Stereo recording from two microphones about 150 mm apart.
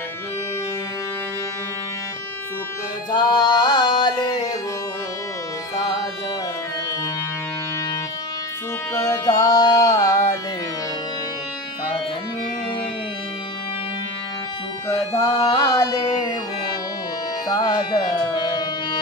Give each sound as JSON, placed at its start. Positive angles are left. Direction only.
{"t": 3.1, "sound": "music", "side_deg": 30}
{"t": 8.9, "sound": "music", "side_deg": 20}
{"t": 14.9, "sound": "music", "side_deg": 25}
{"t": 17.5, "sound": "music", "side_deg": 25}